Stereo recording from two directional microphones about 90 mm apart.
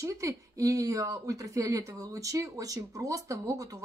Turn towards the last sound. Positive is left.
turn(degrees=-35)  # may be behind; listen again after turning